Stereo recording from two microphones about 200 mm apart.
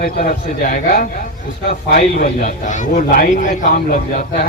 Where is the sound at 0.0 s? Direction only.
45° left (ahead or behind).